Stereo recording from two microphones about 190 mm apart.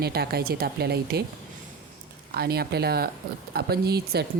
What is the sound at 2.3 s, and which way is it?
A woman's voice, 55° right (ahead or behind).